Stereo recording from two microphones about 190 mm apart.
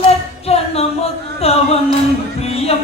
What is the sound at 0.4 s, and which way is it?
Music, 30° left (ahead or behind).